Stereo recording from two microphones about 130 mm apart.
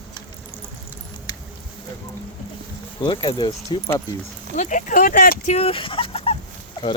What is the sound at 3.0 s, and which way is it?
Speech, 35° left (ahead or behind).